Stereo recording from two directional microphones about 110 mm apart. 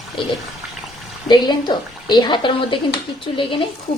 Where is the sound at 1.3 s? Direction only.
40° left (ahead or behind).